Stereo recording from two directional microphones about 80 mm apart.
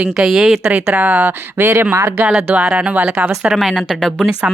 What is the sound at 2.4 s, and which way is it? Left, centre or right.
Speech, centre.